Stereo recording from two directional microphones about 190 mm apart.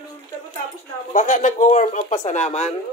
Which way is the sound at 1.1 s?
40° left (ahead or behind).